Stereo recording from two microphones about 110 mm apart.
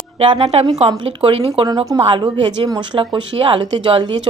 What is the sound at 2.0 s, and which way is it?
A woman's voice, 50° right (ahead or behind).